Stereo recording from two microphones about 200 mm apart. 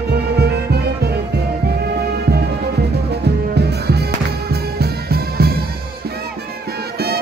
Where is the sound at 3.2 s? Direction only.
55° right (ahead or behind).